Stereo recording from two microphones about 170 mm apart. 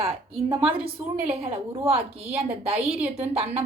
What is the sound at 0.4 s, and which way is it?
Speech, 10° right (ahead or behind).